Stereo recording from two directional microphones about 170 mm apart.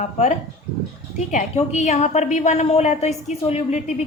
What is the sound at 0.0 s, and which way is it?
A woman's voice, 45° left (ahead or behind).